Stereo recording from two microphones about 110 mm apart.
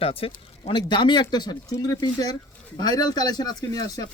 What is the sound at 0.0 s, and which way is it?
Speech, 60° left (ahead or behind).